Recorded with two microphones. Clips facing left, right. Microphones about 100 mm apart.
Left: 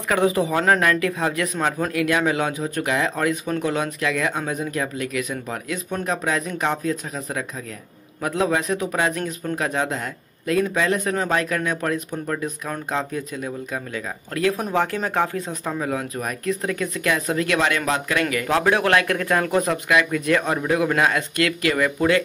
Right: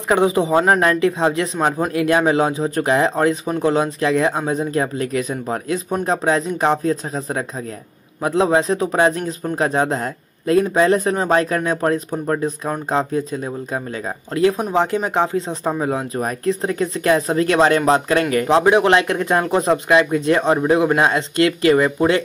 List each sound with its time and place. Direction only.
0.1 s a man's voice: 25° right (ahead or behind)
14.3 s a man's voice: 20° right (ahead or behind)
18.6 s a man's voice: 20° right (ahead or behind)